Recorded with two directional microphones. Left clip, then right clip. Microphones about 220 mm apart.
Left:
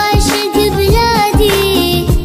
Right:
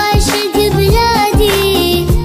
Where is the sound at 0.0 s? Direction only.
Centre (ahead or behind).